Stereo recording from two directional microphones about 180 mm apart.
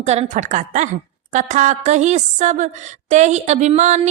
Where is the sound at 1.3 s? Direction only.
40° right (ahead or behind).